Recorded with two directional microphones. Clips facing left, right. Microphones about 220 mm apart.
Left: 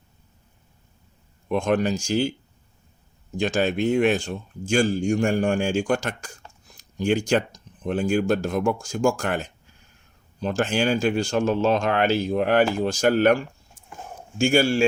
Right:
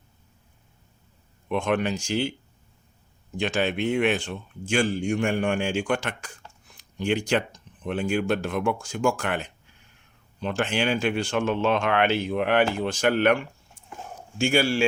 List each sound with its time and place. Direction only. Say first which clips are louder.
1.5 s speech: left 3 dB; 40° left (ahead or behind)
3.3 s speech: left 3 dB; 40° left (ahead or behind)